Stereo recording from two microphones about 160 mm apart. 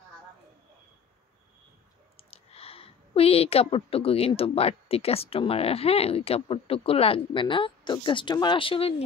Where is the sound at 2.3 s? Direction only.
40° left (ahead or behind).